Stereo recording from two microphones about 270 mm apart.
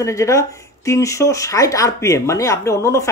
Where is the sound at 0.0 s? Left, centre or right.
Centre.